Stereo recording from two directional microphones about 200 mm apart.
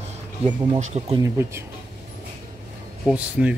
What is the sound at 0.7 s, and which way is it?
Speech, 35° right (ahead or behind).